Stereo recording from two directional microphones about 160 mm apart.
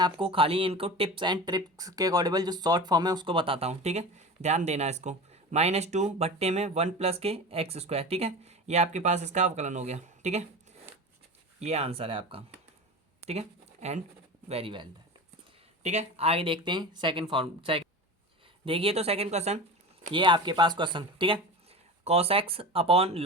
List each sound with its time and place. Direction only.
0.0 s speech: 35° right (ahead or behind)
11.6 s speech: 40° right (ahead or behind)
13.2 s a sound: 40° right (ahead or behind)
14.4 s speech: 35° right (ahead or behind)
15.8 s speech: 45° right (ahead or behind)
20.1 s speech: 30° right (ahead or behind)